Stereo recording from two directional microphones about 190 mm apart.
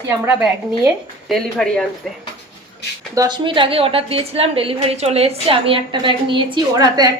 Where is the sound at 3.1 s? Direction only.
20° right (ahead or behind).